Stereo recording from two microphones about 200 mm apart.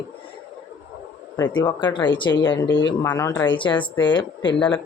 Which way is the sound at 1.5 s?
20° left (ahead or behind).